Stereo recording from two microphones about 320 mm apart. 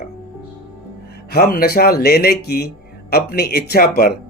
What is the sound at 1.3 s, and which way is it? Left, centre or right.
Speech, left.